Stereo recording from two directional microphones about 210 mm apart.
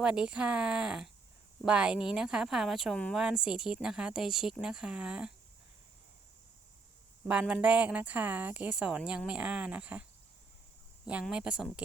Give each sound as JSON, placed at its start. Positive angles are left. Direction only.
{"t": 0.0, "sound": "speech", "side_deg": -5}
{"t": 7.3, "sound": "speech", "side_deg": -5}